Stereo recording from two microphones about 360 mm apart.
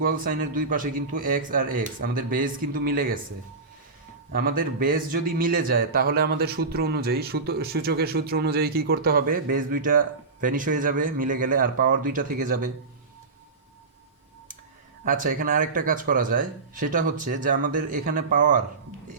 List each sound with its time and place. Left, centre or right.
0.0 s a man's voice: right
4.3 s a man's voice: right
15.0 s a man's voice: right